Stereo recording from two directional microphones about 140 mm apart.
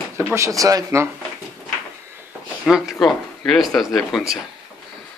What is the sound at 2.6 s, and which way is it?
A man's voice, centre (ahead or behind).